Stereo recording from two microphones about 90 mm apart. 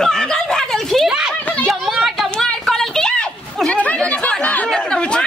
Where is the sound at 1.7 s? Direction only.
Centre (ahead or behind).